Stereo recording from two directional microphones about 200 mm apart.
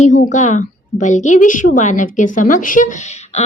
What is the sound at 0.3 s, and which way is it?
A woman's voice, 35° left (ahead or behind).